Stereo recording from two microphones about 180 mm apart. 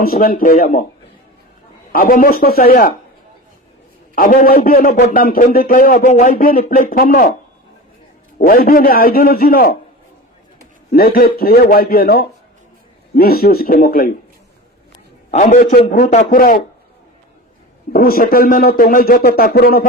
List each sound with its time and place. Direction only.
0.0 s speech: 55° left (ahead or behind)
1.9 s speech: 50° left (ahead or behind)
4.1 s speech: 50° left (ahead or behind)
8.4 s speech: 55° left (ahead or behind)
10.9 s speech: 55° left (ahead or behind)
15.3 s a man's voice: 40° left (ahead or behind)
17.9 s speech: 55° left (ahead or behind)